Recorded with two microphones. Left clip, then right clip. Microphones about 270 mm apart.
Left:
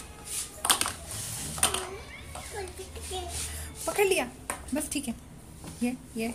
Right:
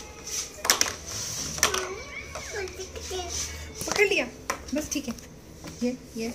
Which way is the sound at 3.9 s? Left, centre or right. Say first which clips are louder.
Right 3 dB; left.